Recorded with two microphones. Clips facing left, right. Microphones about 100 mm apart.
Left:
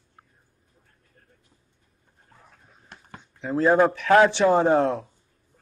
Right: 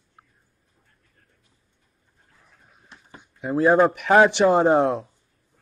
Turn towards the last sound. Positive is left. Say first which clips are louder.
# right 2 dB
turn(degrees=-15)  # may be behind; listen again after turning